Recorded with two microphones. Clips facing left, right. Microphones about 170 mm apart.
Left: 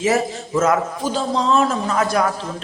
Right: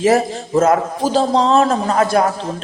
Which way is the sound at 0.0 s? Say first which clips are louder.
Right 5 dB; 35° right (ahead or behind).